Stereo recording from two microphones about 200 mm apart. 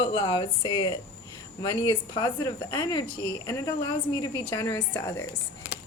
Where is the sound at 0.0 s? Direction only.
20° left (ahead or behind).